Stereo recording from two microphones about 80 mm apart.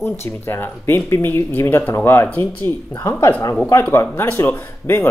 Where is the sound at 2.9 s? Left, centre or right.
Left.